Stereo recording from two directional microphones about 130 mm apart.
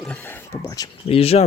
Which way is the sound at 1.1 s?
50° left (ahead or behind).